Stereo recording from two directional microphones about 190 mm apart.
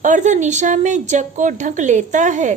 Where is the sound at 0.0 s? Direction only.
40° right (ahead or behind).